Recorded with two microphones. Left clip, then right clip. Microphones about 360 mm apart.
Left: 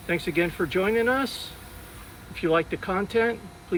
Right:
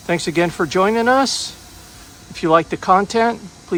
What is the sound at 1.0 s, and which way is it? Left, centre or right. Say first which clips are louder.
Speech: right 10 dB; centre.